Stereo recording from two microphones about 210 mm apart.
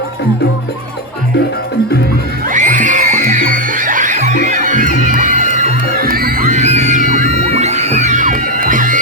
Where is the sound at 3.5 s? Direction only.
40° right (ahead or behind).